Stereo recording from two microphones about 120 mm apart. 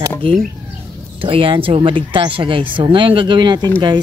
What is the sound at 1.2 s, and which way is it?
Speech, 45° right (ahead or behind).